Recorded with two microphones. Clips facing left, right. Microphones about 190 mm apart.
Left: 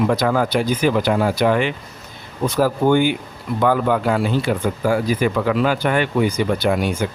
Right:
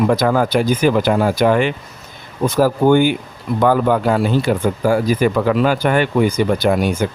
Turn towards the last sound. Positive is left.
turn(degrees=-45)  # may be behind; listen again after turning